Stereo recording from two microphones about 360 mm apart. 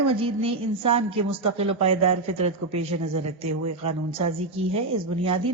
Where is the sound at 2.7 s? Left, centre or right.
Right.